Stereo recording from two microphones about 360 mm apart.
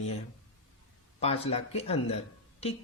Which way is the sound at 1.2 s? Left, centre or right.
Centre.